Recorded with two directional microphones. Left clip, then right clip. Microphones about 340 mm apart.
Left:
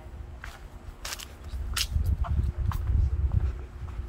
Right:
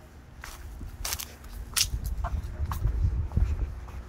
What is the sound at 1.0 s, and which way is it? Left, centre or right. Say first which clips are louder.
Biting: right 2 dB; right.